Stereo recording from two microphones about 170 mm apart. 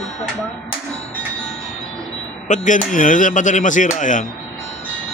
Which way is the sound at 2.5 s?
50° left (ahead or behind).